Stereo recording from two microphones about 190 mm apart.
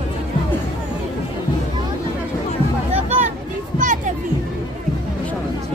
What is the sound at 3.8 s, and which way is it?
Music, 40° right (ahead or behind).